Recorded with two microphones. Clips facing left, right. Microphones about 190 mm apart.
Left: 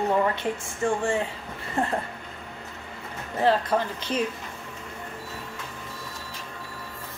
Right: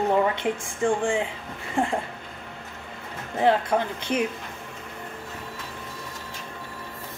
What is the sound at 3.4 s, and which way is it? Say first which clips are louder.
Speech: right 1 dB; 15° right (ahead or behind).